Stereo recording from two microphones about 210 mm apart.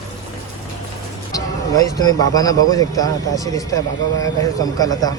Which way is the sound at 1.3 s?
15° left (ahead or behind).